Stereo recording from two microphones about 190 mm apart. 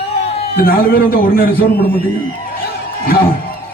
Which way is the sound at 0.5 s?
50° left (ahead or behind).